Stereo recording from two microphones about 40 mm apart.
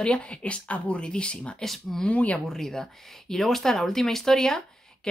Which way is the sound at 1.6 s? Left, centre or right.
Centre.